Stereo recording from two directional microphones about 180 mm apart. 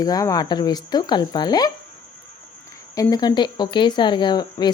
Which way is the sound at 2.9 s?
20° left (ahead or behind).